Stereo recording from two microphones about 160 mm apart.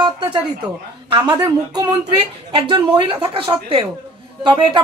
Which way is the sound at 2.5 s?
35° right (ahead or behind).